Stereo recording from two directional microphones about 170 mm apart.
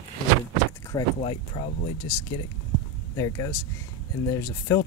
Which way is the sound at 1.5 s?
35° left (ahead or behind).